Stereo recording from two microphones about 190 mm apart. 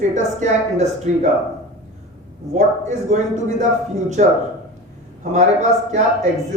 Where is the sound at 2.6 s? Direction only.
40° right (ahead or behind).